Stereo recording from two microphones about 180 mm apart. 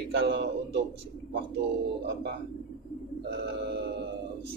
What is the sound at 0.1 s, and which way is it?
Speech, 70° right (ahead or behind).